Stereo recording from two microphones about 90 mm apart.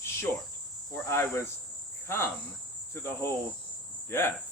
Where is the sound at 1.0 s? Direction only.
30° left (ahead or behind).